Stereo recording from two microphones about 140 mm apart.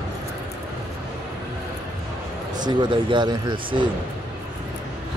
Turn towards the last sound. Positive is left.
turn(degrees=-35)  # may be behind; listen again after turning